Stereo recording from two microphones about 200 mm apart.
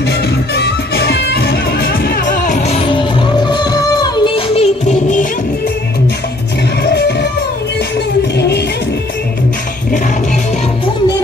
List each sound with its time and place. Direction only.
0.6 s music: 55° left (ahead or behind); by 5.2 s 35° left (ahead or behind)
6.8 s music: 55° left (ahead or behind)
8.4 s music: 55° left (ahead or behind)